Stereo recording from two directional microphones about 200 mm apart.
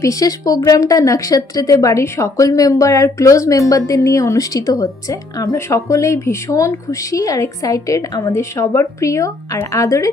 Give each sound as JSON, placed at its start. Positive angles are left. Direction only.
{"t": 0.0, "sound": "a woman's voice", "side_deg": 15}